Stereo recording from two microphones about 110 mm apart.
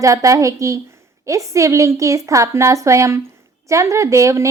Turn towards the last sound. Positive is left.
turn(degrees=-30)  # may be behind; listen again after turning